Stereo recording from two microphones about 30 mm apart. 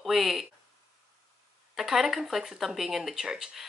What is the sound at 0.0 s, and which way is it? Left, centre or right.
Speech, centre.